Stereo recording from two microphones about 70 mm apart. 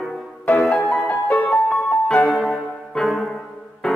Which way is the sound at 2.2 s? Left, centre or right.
Centre.